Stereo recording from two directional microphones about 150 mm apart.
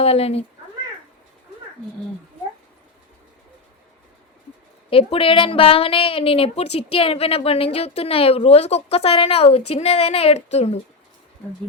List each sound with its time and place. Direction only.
0.0 s speech: 45° left (ahead or behind)
4.9 s a woman's voice: 35° left (ahead or behind)